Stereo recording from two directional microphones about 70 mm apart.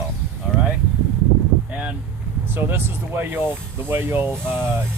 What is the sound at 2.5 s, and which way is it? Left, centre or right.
Speech, right.